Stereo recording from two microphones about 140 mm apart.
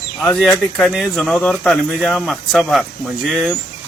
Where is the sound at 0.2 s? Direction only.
5° left (ahead or behind).